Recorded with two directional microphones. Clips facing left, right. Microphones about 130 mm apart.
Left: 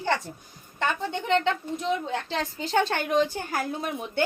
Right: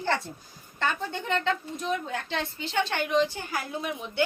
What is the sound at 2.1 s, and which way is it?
A woman's voice, 35° left (ahead or behind).